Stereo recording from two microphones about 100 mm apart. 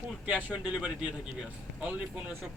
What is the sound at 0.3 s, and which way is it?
Speech, 15° right (ahead or behind).